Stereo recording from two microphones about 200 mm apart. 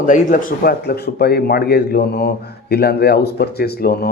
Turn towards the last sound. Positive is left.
turn(degrees=50)  # may be behind; listen again after turning